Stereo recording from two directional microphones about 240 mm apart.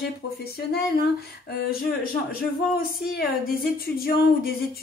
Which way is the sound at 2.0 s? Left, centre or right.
Left.